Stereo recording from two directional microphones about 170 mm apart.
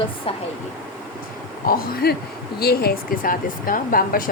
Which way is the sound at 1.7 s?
60° left (ahead or behind).